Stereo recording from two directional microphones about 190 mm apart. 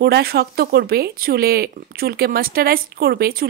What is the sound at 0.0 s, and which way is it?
Speech, 55° right (ahead or behind).